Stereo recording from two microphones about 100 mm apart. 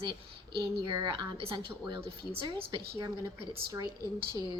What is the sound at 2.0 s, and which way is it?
Speech, 70° right (ahead or behind).